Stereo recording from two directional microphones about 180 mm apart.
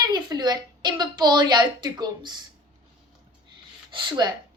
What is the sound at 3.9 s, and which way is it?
Speech, 25° right (ahead or behind).